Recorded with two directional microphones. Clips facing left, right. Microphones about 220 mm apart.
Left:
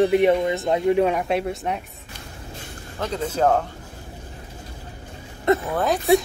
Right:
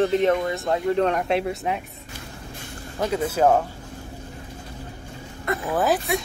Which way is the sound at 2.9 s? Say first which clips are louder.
Right 2 dB; 10° right (ahead or behind).